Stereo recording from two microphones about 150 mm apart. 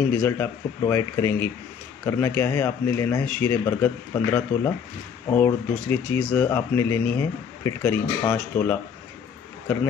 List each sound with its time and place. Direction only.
0.2 s speech: 15° left (ahead or behind)